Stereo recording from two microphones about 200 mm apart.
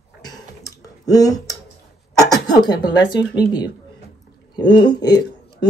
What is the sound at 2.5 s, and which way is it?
Speech, 20° left (ahead or behind).